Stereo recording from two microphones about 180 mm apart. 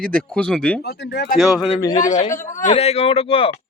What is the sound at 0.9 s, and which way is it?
Speech, 65° left (ahead or behind).